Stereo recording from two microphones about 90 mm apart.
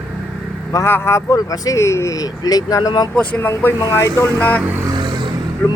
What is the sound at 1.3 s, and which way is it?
Speech, 40° left (ahead or behind).